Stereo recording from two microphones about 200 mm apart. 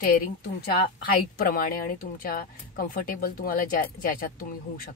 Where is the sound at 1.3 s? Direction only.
50° left (ahead or behind).